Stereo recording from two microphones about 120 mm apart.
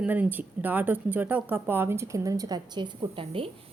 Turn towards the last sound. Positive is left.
turn(degrees=-50)  # may be behind; listen again after turning